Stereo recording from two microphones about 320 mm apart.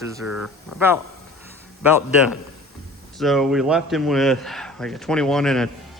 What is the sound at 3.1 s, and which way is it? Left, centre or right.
A man's voice, centre.